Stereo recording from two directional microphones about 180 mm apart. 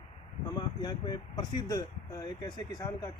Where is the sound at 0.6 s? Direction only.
25° left (ahead or behind).